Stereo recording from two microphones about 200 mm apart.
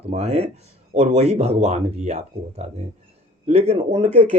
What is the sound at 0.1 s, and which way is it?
Speech, 35° right (ahead or behind).